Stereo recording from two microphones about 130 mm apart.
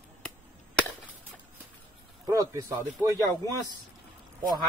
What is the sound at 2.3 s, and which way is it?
Speech, 25° right (ahead or behind).